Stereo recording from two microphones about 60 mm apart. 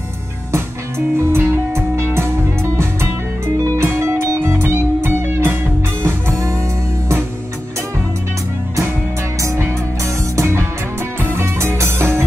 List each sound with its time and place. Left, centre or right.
0.5 s music: right
6.0 s music: right
9.7 s music: right